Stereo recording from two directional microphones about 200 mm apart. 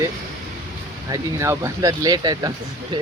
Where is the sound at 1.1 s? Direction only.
15° right (ahead or behind).